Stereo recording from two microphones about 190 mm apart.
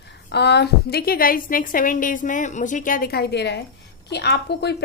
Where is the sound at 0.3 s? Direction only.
60° left (ahead or behind).